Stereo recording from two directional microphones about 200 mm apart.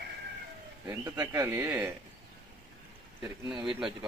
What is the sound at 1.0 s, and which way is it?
Speech, 15° right (ahead or behind).